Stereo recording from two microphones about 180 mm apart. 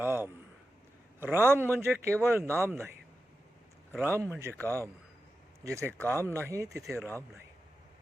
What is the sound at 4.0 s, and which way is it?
Speech, 10° right (ahead or behind).